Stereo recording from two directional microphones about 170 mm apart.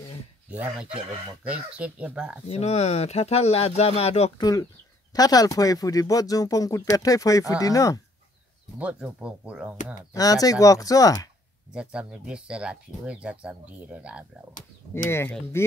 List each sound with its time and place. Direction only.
0.5 s speech: 10° right (ahead or behind)
2.4 s speech: 35° left (ahead or behind)
4.4 s speech: 20° left (ahead or behind)
8.7 s speech: 5° right (ahead or behind)
10.1 s speech: 20° left (ahead or behind)
11.7 s speech: 5° right (ahead or behind)
15.0 s speech: 15° left (ahead or behind)